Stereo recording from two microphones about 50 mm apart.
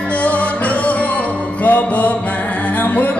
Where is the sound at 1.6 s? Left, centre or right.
Left.